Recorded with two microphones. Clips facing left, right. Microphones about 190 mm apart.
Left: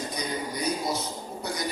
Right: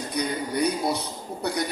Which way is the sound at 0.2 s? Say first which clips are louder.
Right 9 dB; 60° right (ahead or behind).